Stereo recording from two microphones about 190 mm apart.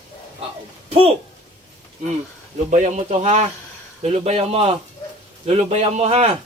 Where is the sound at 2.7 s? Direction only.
40° right (ahead or behind).